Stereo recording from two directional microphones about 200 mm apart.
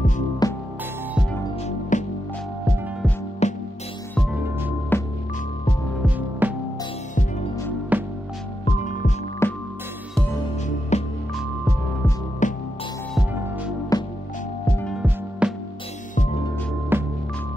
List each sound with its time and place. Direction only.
0.4 s music: 20° left (ahead or behind)
1.9 s music: 40° left (ahead or behind)
3.4 s music: 35° left (ahead or behind)
4.9 s music: 10° left (ahead or behind)
6.0 s music: 10° right (ahead or behind)
7.9 s music: 10° right (ahead or behind)
8.7 s music: 40° left (ahead or behind)
9.4 s music: 10° left (ahead or behind)
10.9 s music: 35° left (ahead or behind)
12.4 s music: 40° left (ahead or behind)
13.9 s music: 15° left (ahead or behind)
15.4 s music: 5° right (ahead or behind)
16.9 s music: 10° right (ahead or behind)